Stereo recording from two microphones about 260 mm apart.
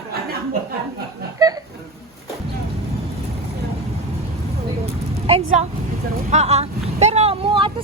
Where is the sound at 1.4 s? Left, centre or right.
Centre.